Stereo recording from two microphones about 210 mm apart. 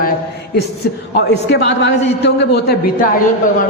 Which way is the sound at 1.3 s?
55° left (ahead or behind).